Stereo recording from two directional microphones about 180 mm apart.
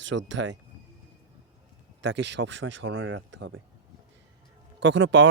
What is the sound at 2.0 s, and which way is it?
Speech, 80° right.